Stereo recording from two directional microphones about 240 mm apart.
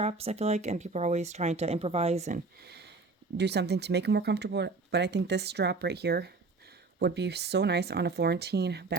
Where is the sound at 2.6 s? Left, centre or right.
Right.